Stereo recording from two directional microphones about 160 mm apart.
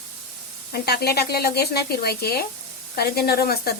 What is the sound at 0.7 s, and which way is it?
Speech, 80° left.